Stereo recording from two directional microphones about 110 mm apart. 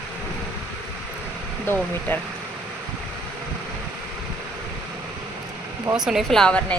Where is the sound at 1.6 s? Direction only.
15° left (ahead or behind).